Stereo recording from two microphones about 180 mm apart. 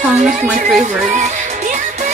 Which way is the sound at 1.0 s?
45° right (ahead or behind).